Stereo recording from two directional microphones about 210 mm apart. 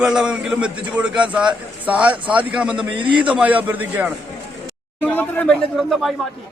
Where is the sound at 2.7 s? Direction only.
25° right (ahead or behind).